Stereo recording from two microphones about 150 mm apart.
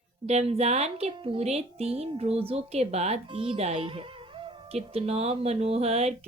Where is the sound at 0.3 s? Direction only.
45° right (ahead or behind).